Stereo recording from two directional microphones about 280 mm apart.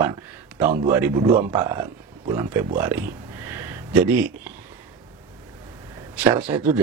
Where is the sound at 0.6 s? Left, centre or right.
Right.